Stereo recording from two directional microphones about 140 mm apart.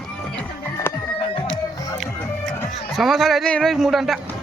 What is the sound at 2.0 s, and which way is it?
Music, 15° left (ahead or behind).